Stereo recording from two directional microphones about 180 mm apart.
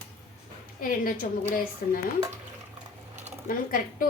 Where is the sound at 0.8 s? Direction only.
50° left (ahead or behind).